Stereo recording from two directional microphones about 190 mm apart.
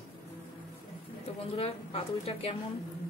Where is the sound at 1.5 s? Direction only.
30° left (ahead or behind).